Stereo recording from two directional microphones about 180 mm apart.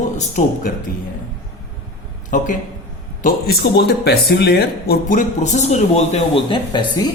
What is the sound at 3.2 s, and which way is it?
Speech, 60° left (ahead or behind).